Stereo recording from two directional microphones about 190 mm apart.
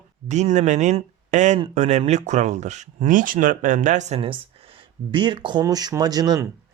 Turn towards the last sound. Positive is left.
turn(degrees=-20)  # may be behind; listen again after turning